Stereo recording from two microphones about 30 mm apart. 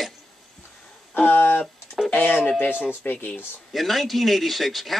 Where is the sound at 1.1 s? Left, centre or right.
Left.